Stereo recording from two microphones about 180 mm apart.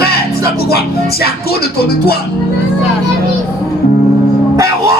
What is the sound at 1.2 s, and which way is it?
Music, 60° left (ahead or behind).